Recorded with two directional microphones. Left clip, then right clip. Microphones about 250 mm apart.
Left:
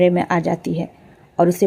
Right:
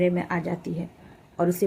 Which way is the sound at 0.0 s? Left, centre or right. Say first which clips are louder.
Left 9 dB; left.